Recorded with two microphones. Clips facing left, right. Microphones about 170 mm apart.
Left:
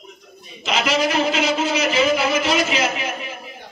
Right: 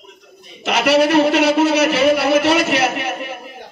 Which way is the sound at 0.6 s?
65° right (ahead or behind).